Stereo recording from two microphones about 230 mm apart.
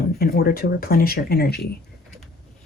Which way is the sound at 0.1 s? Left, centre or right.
Left.